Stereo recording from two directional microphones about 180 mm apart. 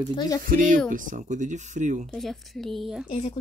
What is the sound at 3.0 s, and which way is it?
Speech, 35° left (ahead or behind).